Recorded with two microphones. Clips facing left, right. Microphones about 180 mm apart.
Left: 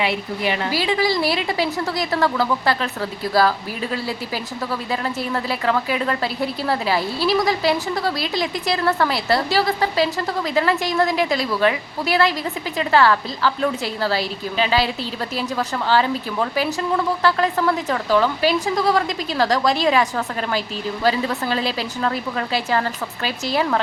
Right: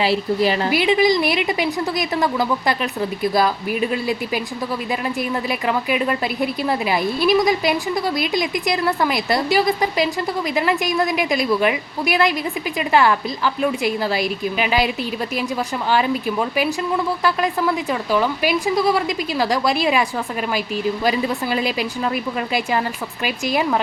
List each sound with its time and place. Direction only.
0.0 s a woman's voice: 35° right (ahead or behind)
0.7 s a woman's voice: 20° right (ahead or behind)